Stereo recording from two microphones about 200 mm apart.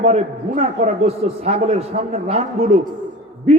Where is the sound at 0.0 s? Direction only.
30° right (ahead or behind).